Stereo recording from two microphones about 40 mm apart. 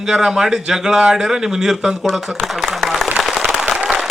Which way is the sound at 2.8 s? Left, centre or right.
Centre.